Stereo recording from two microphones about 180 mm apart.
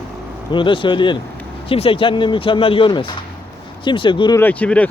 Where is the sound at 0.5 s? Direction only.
25° left (ahead or behind).